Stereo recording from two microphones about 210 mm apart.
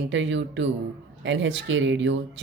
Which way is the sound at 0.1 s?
60° right (ahead or behind).